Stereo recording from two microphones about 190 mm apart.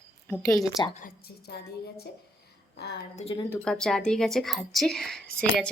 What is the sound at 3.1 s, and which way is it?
Speech, 30° left (ahead or behind).